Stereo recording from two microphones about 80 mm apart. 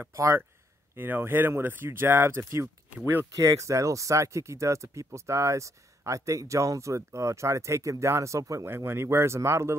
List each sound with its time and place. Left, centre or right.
0.0 s speech: right
0.9 s speech: right
3.4 s speech: right
8.6 s speech: right